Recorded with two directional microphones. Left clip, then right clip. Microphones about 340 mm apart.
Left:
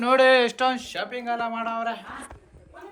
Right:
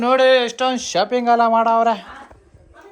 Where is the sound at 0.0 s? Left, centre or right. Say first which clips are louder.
Right 4 dB; centre.